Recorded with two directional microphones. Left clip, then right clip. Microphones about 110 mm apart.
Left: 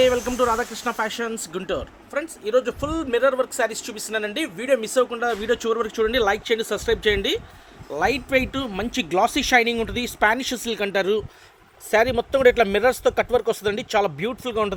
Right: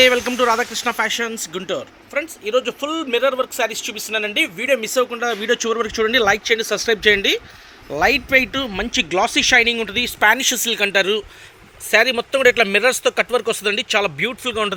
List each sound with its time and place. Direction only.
0.0 s speech: 20° right (ahead or behind); by 7.4 s 40° right (ahead or behind)
7.9 s speech: 25° right (ahead or behind)
8.4 s speech: 10° right (ahead or behind); by 14.7 s 10° left (ahead or behind)